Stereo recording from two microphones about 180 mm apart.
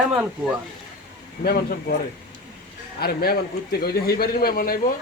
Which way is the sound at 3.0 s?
60° left (ahead or behind).